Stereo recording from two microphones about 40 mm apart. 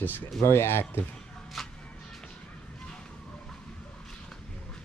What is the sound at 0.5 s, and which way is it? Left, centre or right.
Speech, left.